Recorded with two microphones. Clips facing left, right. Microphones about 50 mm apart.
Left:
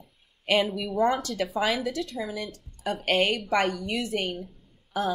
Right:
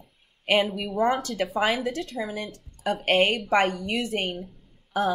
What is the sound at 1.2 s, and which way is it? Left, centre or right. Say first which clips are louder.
Speech: right 1 dB; right.